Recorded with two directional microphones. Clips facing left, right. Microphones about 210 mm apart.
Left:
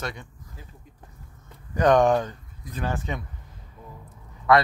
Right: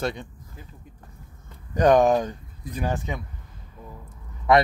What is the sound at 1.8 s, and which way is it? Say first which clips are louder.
Speech: right 1 dB; 10° right (ahead or behind).